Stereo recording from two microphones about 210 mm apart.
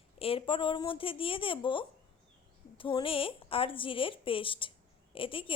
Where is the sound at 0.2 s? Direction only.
25° left (ahead or behind).